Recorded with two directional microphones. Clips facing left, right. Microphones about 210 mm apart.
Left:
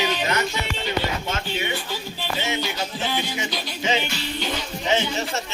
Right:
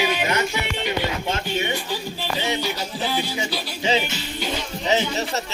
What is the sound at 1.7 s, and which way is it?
Music, 15° right (ahead or behind).